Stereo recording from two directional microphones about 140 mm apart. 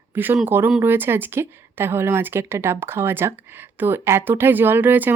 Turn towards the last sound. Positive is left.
turn(degrees=-15)  # may be behind; listen again after turning